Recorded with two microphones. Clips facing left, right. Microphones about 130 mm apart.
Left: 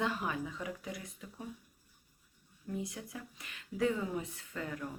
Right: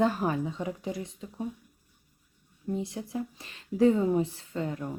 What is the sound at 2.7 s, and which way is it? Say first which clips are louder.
Speech: right 8 dB; 30° right (ahead or behind).